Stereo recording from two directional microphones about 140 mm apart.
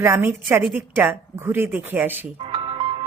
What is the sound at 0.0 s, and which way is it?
A woman's voice, 20° right (ahead or behind).